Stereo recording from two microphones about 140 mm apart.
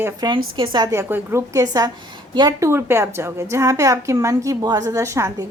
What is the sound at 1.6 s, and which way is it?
A woman's voice, 30° right (ahead or behind).